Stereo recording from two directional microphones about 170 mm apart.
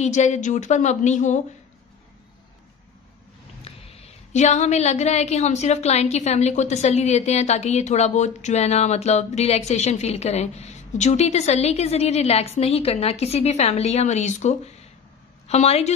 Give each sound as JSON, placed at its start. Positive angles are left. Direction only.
{"t": 0.0, "sound": "speech", "side_deg": 45}
{"t": 3.6, "sound": "a woman's voice", "side_deg": 40}